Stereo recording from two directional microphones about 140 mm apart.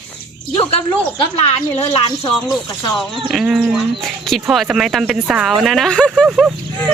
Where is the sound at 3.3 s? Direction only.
5° right (ahead or behind).